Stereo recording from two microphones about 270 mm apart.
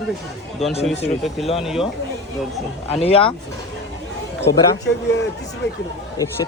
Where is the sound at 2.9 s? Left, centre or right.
Left.